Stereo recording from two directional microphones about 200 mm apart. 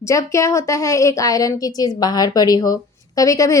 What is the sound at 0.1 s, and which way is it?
A woman's voice, 15° left (ahead or behind).